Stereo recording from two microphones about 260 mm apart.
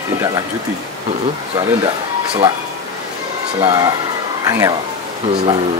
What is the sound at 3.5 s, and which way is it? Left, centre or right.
Speech, centre.